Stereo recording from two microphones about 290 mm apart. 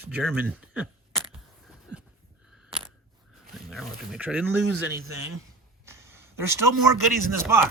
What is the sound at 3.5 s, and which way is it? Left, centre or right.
Speech, centre.